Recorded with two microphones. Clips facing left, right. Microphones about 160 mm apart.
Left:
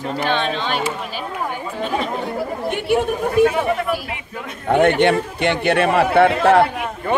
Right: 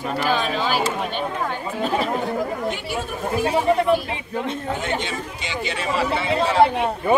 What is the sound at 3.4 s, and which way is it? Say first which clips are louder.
Speech: even; 30° right (ahead or behind).